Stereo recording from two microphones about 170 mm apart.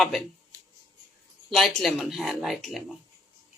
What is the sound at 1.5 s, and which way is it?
Speech, centre (ahead or behind).